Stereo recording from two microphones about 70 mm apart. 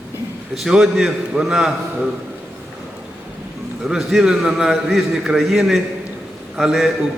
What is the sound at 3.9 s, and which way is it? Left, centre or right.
A man's voice, centre.